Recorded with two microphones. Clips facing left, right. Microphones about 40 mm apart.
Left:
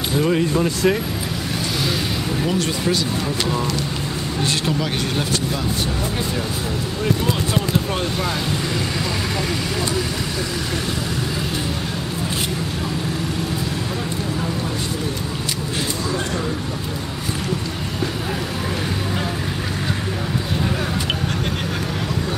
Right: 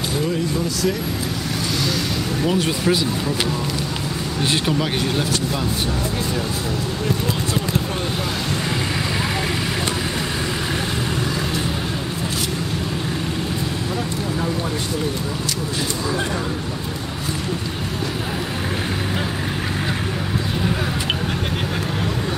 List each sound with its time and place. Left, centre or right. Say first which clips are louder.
0.3 s speech: left 4 dB; left
4.4 s speech: right 2 dB; centre